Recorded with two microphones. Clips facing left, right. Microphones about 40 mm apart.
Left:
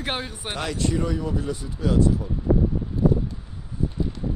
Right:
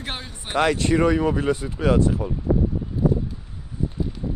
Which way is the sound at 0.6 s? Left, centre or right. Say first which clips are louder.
Right 7 dB; right.